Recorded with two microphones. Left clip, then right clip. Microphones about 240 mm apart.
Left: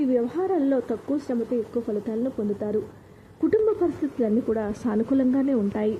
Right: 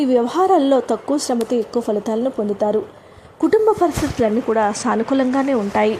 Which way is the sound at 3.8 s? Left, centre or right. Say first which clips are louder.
Right 8 dB; centre.